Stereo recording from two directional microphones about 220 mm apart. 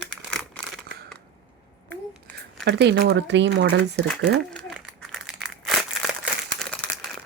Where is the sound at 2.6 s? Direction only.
50° right (ahead or behind).